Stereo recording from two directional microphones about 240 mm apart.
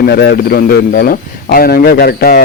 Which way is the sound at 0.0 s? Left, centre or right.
Left.